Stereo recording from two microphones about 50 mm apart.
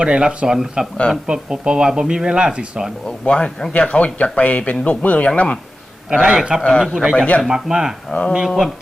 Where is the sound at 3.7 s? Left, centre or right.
Left.